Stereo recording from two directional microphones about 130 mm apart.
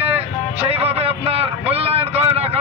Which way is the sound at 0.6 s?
50° right (ahead or behind).